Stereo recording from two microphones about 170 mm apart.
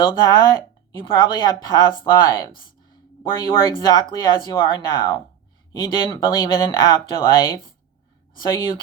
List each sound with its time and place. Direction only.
0.0 s speech: 25° left (ahead or behind)